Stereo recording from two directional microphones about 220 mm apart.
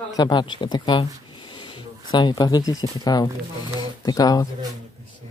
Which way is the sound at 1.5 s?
20° left (ahead or behind).